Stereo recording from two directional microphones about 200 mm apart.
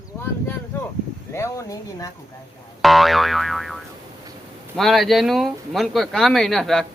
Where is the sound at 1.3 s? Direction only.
15° left (ahead or behind).